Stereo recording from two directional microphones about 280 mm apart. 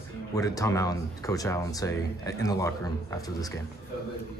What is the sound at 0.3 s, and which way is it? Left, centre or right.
Speech, centre.